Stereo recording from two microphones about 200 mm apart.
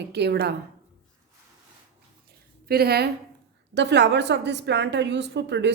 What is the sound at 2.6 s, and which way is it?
A woman's voice, 50° right (ahead or behind).